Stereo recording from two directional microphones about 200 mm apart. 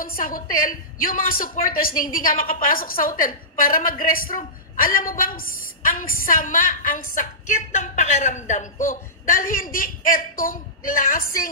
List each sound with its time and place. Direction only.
0.0 s a woman's voice: 45° left (ahead or behind)